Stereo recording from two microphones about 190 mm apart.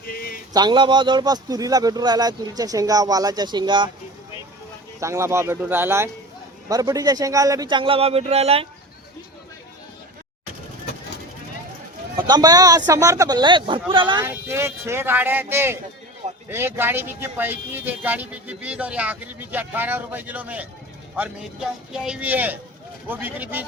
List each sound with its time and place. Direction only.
0.0 s a sound: 50° left (ahead or behind)
0.5 s speech: 25° right (ahead or behind)
4.9 s speech: 15° right (ahead or behind); by 8.6 s 30° right (ahead or behind)
12.3 s speech: 20° right (ahead or behind)
14.2 s speech: 10° right (ahead or behind)